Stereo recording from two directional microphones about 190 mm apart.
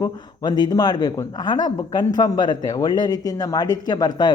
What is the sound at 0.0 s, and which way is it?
A man's voice, 20° left (ahead or behind).